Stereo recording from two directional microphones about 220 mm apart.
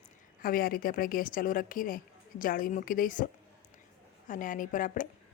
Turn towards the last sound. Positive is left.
turn(degrees=35)  # may be behind; listen again after turning